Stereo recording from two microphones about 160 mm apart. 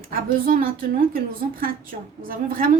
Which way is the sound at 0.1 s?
65° right (ahead or behind).